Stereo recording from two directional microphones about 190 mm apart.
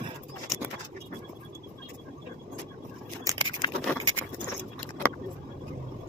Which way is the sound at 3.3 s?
20° right (ahead or behind).